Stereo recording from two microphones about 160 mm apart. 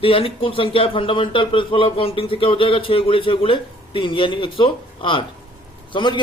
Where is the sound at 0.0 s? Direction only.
35° left (ahead or behind).